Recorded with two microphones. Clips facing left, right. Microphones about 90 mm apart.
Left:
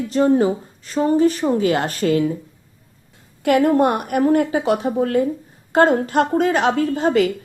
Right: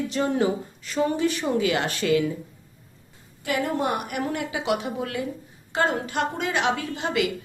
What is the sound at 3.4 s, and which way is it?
A woman's voice, 55° left (ahead or behind).